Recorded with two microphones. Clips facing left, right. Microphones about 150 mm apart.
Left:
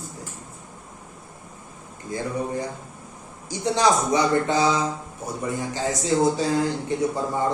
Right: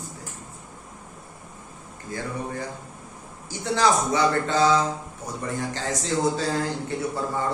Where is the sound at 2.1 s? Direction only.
20° left (ahead or behind).